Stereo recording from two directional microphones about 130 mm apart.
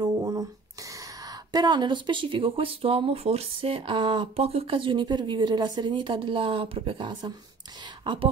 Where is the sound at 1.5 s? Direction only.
35° right (ahead or behind).